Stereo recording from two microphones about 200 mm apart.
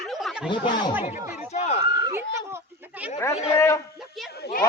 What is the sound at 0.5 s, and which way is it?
Speech, 25° left (ahead or behind).